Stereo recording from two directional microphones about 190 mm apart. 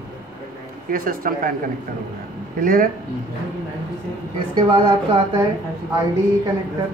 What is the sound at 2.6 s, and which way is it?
Speech, 45° right (ahead or behind).